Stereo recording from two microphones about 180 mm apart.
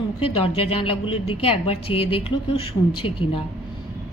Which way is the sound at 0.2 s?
30° left (ahead or behind).